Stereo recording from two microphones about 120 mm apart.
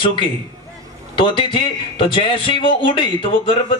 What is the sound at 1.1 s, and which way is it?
A man's voice, 45° left (ahead or behind).